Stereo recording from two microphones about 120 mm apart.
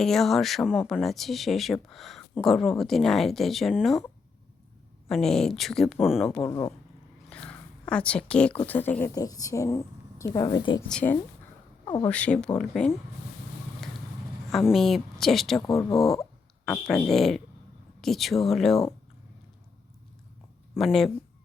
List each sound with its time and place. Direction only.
0.0 s speech: 5° left (ahead or behind)
5.0 s speech: 5° left (ahead or behind)
6.3 s a woman's voice: 15° left (ahead or behind)
9.1 s speech: 30° left (ahead or behind)
10.8 s speech: 5° left (ahead or behind)
14.5 s speech: centre (ahead or behind)
15.6 s speech: 25° left (ahead or behind)
15.9 s speech: centre (ahead or behind)
20.7 s speech: 5° left (ahead or behind)